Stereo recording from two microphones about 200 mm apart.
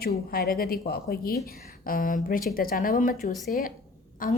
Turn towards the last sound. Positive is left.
turn(degrees=45)  # may be behind; listen again after turning